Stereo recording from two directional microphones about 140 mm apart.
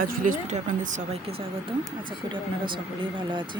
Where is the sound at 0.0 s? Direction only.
80° right; by 0.9 s 60° right (ahead or behind).